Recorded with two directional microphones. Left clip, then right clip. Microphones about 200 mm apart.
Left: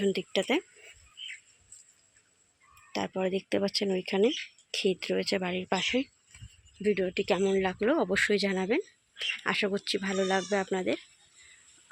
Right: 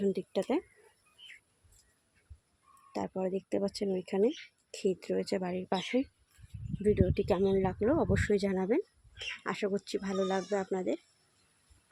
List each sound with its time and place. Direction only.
0.0 s speech: 5° right (ahead or behind)
3.1 s speech: centre (ahead or behind)